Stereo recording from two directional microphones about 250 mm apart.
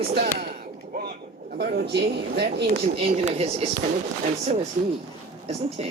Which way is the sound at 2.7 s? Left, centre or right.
Right.